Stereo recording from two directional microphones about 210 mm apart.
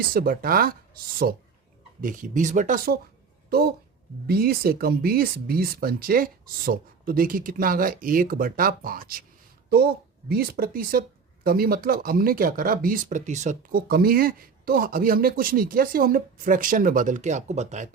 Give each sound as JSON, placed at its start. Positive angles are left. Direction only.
{"t": 0.1, "sound": "speech", "side_deg": -45}